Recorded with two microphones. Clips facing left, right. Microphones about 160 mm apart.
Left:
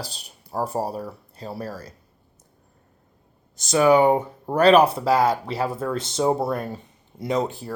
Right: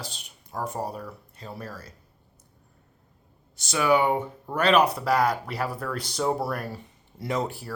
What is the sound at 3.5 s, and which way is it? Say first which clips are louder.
Speech: left 6 dB; 40° left (ahead or behind).